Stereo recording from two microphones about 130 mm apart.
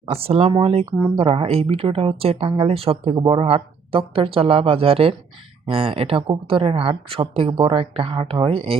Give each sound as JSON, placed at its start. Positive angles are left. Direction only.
{"t": 0.0, "sound": "speech", "side_deg": -50}